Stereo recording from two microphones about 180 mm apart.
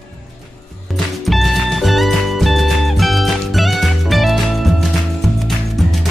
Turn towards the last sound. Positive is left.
turn(degrees=0)  # may be behind; listen again after turning